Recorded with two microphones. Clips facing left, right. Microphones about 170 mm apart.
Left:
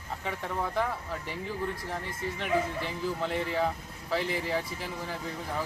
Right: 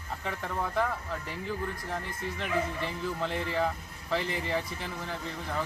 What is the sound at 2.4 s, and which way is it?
Speech, centre (ahead or behind).